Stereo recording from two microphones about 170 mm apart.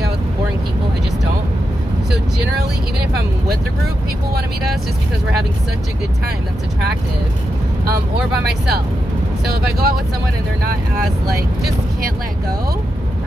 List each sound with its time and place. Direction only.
9.5 s speech: 65° right (ahead or behind)